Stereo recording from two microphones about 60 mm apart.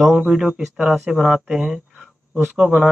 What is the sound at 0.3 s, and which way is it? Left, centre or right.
Speech, centre.